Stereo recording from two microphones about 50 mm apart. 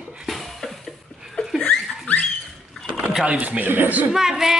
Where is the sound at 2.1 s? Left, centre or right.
Left.